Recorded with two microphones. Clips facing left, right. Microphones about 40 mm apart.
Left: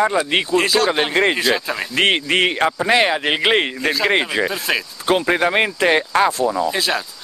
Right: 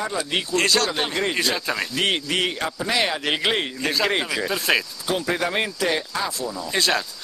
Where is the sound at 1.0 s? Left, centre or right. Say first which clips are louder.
Left 7 dB; left.